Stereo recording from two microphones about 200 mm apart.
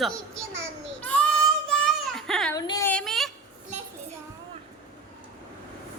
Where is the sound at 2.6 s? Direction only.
15° left (ahead or behind).